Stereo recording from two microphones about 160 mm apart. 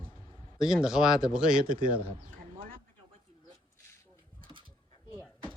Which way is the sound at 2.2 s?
55° right (ahead or behind).